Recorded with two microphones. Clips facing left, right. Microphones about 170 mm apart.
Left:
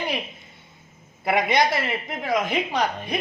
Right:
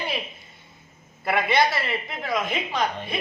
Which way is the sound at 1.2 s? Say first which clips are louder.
Left 1 dB; 15° left (ahead or behind).